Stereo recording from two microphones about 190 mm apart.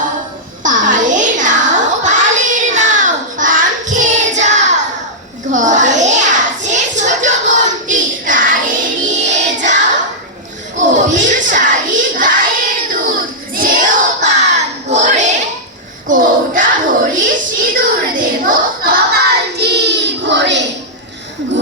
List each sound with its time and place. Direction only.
0.6 s child singing: 40° right (ahead or behind)
4.2 s music: 40° right (ahead or behind)
5.5 s a sound: 40° right (ahead or behind)
12.9 s child singing: 45° right (ahead or behind)
16.0 s a sound: 45° right (ahead or behind)
17.7 s child singing: 45° right (ahead or behind); by 20.7 s 70° right (ahead or behind)